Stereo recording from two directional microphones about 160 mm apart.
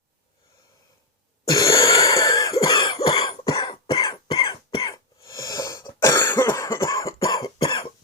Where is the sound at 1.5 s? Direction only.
20° left (ahead or behind).